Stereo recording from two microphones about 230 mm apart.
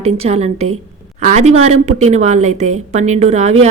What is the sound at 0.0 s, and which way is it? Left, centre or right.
A woman's voice, right.